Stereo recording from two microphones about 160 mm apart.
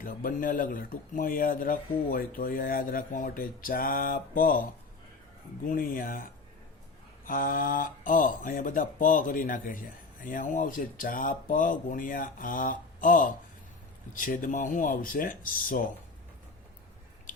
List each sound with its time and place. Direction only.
0.0 s speech: 60° left (ahead or behind)
5.6 s speech: 60° left (ahead or behind)
7.3 s speech: 60° left (ahead or behind)